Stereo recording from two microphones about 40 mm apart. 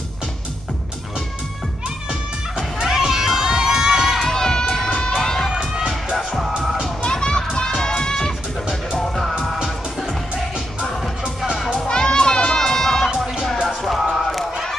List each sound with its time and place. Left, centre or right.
2.8 s crowd: centre
4.3 s a sound: centre
5.1 s crowd: centre
5.5 s music: centre
6.1 s music: centre
7.0 s children playing: left
11.9 s crowd: centre
13.5 s music: centre